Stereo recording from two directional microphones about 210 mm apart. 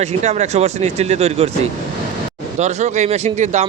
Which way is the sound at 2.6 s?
30° right (ahead or behind).